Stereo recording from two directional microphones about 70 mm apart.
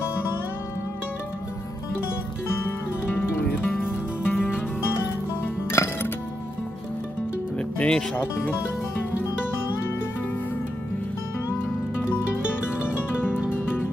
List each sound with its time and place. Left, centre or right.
3.2 s music: left
7.5 s music: centre
12.8 s music: left